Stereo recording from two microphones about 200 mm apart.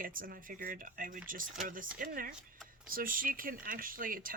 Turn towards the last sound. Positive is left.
turn(degrees=-45)  # may be behind; listen again after turning